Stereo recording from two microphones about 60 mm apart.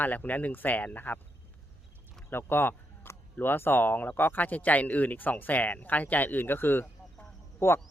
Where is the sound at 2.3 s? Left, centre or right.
Left.